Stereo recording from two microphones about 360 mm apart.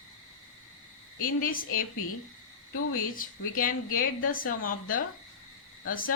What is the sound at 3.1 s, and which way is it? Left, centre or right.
Speech, left.